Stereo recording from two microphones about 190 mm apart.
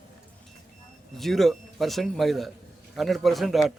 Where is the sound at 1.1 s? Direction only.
Centre (ahead or behind).